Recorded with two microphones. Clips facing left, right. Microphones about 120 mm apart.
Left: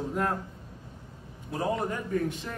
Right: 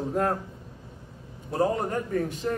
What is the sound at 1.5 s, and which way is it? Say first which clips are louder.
A man's voice: right 4 dB; 40° right (ahead or behind).